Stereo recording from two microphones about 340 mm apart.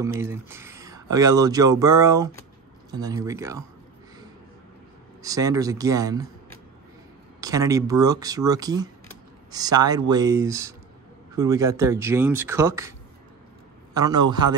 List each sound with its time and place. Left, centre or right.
0.2 s speech: centre
5.2 s speech: centre
7.3 s speech: centre
13.9 s speech: centre